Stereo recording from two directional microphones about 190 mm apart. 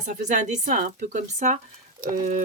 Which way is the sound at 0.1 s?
40° right (ahead or behind).